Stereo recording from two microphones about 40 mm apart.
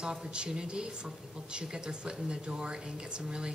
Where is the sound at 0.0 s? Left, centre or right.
Centre.